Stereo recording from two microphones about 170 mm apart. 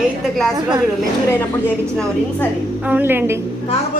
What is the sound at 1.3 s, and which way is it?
A woman's voice, 10° left (ahead or behind).